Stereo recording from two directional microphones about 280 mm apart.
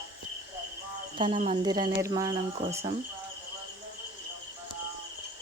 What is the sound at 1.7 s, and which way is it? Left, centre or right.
Speech, centre.